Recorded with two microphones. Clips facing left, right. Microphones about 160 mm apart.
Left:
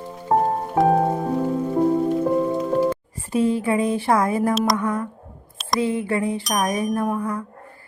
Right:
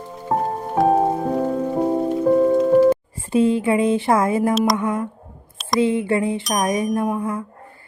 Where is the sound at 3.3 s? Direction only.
25° right (ahead or behind).